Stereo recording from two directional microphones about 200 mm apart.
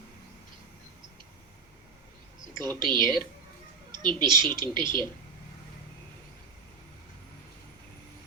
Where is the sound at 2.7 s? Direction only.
25° right (ahead or behind).